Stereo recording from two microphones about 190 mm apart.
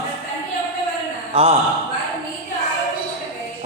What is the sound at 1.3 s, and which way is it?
Speech, 30° right (ahead or behind).